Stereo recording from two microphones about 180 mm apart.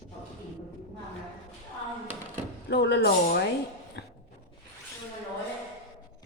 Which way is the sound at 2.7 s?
70° left (ahead or behind).